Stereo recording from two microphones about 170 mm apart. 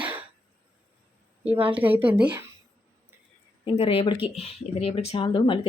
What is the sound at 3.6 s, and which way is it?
Speech, 35° left (ahead or behind).